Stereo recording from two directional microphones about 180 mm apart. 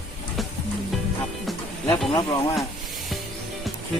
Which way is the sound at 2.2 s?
20° left (ahead or behind).